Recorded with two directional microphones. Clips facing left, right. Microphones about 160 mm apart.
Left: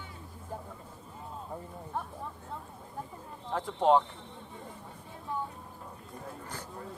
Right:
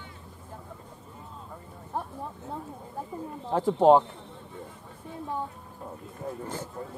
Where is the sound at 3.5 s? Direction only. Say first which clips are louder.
Right 6 dB; 35° right (ahead or behind).